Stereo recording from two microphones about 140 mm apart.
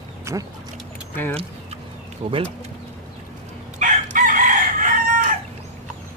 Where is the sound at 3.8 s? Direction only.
65° right (ahead or behind).